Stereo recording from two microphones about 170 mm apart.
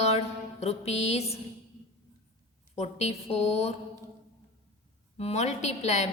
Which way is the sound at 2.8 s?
40° left (ahead or behind).